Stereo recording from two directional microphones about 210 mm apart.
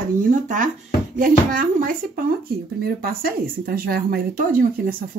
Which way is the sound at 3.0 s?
45° right (ahead or behind).